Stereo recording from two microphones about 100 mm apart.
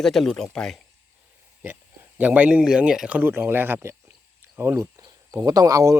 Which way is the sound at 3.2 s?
20° right (ahead or behind).